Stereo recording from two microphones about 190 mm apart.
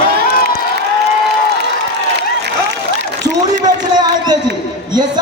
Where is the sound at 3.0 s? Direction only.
65° right (ahead or behind).